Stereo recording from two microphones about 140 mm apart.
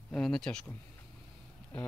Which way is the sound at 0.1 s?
5° left (ahead or behind).